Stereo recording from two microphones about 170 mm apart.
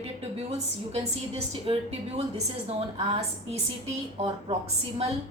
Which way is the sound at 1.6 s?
35° right (ahead or behind).